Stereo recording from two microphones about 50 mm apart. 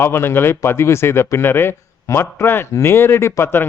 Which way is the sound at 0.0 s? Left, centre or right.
Left.